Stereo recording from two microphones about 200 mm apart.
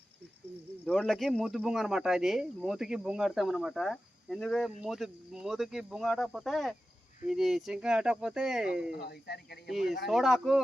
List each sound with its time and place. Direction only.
0.9 s speech: centre (ahead or behind)
8.9 s speech: 50° left (ahead or behind)
9.6 s speech: centre (ahead or behind)